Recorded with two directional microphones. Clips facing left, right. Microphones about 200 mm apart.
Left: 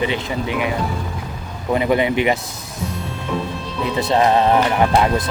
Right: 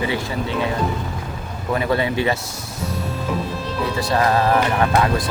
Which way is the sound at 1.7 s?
20° left (ahead or behind).